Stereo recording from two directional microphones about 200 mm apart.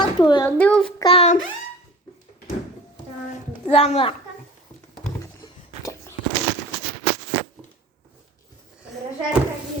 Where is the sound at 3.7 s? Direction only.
30° left (ahead or behind).